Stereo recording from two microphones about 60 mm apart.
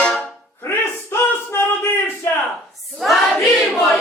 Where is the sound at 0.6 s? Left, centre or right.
Left.